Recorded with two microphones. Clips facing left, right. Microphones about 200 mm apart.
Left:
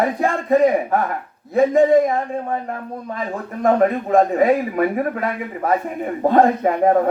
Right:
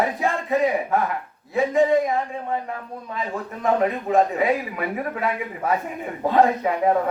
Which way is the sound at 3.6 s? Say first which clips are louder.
Left 5 dB; 50° left (ahead or behind).